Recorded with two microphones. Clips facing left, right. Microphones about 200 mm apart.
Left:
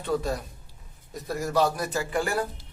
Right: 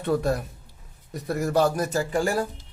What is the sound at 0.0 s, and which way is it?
A man's voice, 60° right (ahead or behind).